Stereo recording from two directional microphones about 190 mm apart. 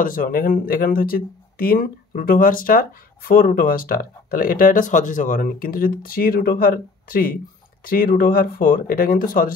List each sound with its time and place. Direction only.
0.0 s speech: 50° left (ahead or behind)